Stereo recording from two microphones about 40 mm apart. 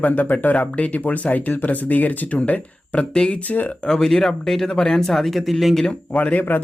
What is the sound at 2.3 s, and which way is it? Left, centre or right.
Speech, left.